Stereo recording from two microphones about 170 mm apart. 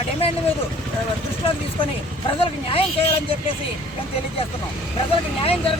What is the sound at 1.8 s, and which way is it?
Speech, 30° left (ahead or behind).